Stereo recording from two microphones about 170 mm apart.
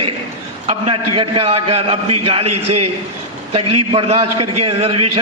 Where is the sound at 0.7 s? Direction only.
35° right (ahead or behind).